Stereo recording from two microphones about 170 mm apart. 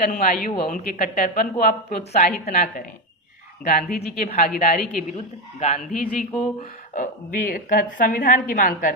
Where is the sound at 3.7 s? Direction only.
60° left (ahead or behind).